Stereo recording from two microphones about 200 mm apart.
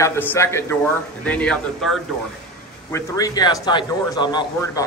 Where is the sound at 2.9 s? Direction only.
20° left (ahead or behind).